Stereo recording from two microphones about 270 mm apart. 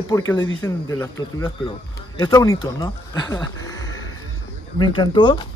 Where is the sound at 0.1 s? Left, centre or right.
Centre.